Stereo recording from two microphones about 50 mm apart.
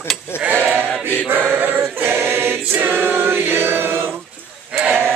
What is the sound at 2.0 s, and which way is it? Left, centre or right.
Choir, right.